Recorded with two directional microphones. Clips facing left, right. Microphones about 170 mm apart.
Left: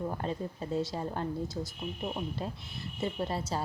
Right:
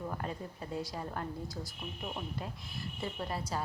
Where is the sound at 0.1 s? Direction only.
25° left (ahead or behind).